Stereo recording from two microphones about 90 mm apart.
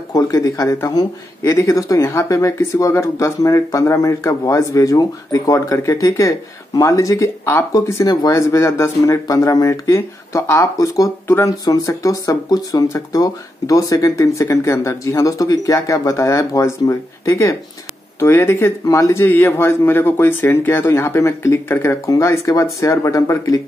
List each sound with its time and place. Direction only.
0.1 s speech: 40° left (ahead or behind)